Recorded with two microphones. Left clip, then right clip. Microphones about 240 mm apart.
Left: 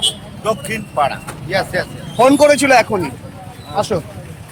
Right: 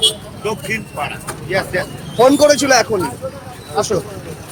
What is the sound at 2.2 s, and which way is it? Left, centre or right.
Speech, centre.